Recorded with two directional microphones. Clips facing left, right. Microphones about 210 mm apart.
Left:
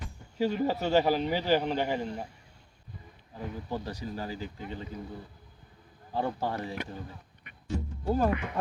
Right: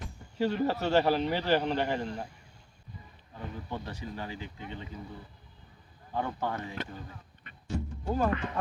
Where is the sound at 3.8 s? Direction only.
40° left (ahead or behind).